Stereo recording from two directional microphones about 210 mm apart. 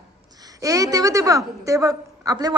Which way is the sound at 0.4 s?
15° right (ahead or behind).